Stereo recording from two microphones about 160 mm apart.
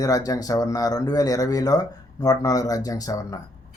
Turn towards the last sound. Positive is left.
turn(degrees=20)  # may be behind; listen again after turning